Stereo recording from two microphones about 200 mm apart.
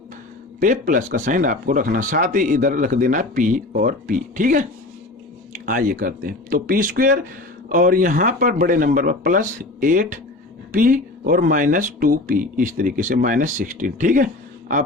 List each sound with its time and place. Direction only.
0.6 s speech: 40° right (ahead or behind)